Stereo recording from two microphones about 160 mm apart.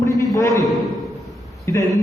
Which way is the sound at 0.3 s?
20° left (ahead or behind).